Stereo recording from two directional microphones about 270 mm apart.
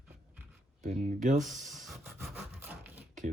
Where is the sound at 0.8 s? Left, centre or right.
Right.